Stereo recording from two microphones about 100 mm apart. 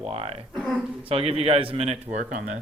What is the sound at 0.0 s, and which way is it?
A man's voice, 75° right (ahead or behind).